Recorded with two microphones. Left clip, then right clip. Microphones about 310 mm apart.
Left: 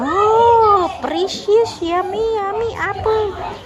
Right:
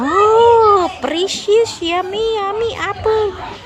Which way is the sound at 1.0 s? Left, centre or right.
Centre.